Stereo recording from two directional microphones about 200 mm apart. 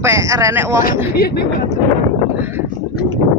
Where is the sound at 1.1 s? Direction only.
50° left (ahead or behind).